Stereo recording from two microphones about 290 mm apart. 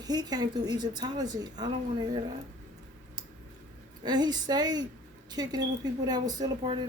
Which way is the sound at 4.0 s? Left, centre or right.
Centre.